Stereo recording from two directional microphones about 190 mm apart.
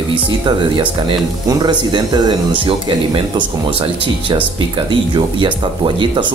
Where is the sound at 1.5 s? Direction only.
20° right (ahead or behind).